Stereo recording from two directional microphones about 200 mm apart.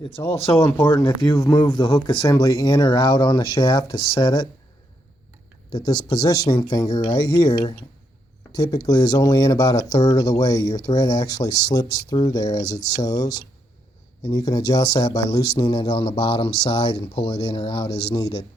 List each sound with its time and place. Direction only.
0.3 s speech: 30° left (ahead or behind)
5.7 s speech: 20° left (ahead or behind)